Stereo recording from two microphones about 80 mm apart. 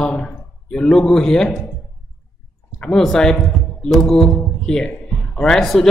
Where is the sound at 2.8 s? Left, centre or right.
Centre.